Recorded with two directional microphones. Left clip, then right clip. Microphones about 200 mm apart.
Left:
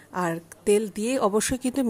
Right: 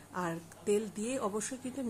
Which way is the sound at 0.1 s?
40° left (ahead or behind).